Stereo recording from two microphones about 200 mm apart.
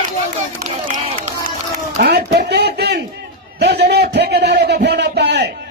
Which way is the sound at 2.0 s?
55° right (ahead or behind).